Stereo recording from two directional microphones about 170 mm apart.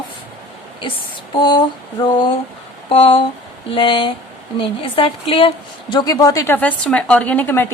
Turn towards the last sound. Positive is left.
turn(degrees=10)  # may be behind; listen again after turning